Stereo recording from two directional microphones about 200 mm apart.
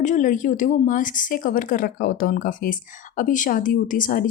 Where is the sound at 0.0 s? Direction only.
40° left (ahead or behind).